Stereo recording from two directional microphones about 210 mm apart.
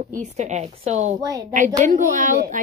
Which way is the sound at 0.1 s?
35° right (ahead or behind).